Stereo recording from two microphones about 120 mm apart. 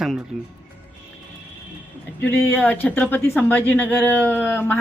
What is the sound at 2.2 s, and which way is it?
Speech, 15° left (ahead or behind).